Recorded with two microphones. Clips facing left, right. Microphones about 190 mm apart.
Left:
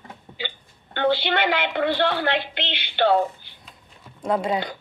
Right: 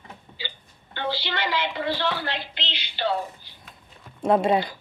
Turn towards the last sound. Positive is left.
turn(degrees=-25)  # may be behind; listen again after turning